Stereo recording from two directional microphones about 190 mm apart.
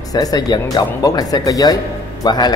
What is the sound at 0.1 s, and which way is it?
Speech, 20° left (ahead or behind).